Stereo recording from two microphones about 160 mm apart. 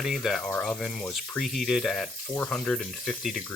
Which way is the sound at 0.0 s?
Centre (ahead or behind).